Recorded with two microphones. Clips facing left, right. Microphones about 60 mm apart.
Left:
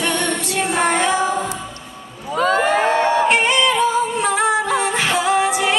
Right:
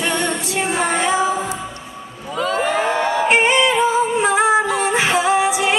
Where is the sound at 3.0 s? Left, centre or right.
Centre.